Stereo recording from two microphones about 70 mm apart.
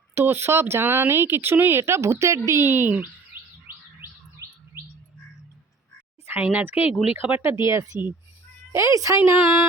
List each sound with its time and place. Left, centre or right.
0.1 s speech: right
3.3 s bird: right
6.4 s speech: right
7.4 s speech: right